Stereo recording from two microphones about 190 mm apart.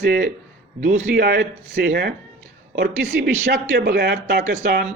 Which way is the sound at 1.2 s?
60° right (ahead or behind).